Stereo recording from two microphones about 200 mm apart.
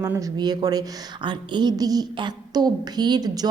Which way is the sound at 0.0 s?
20° right (ahead or behind).